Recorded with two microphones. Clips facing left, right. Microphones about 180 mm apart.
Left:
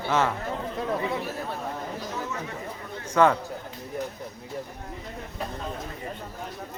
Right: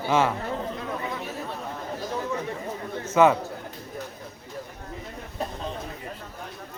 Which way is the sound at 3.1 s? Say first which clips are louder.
Right 2 dB; 10° right (ahead or behind).